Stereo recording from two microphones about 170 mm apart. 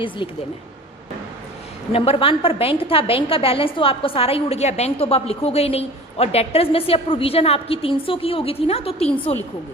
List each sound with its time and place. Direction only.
1.9 s a woman's voice: 35° left (ahead or behind)